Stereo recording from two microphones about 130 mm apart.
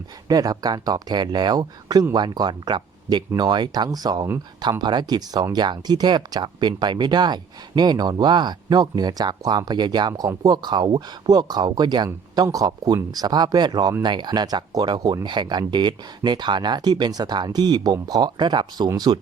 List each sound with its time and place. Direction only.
0.3 s speech: 30° right (ahead or behind)